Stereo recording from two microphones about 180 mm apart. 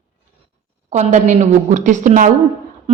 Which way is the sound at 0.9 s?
40° right (ahead or behind).